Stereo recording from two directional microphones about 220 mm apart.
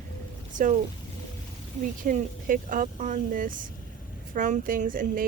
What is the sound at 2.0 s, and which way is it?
Speech, 35° right (ahead or behind).